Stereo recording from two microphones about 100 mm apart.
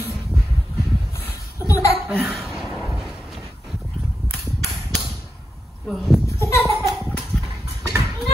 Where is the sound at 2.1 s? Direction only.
Centre (ahead or behind).